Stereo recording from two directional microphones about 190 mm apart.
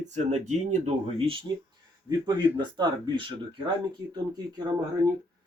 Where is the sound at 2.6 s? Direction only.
25° right (ahead or behind).